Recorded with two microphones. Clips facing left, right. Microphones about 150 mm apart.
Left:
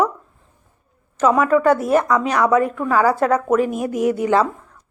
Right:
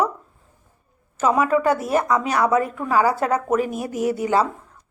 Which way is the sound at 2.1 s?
30° right (ahead or behind).